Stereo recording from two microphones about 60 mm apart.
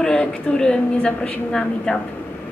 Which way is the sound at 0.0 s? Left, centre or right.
Centre.